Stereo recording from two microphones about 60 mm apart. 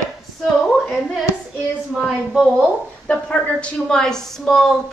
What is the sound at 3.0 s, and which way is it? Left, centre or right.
Speech, left.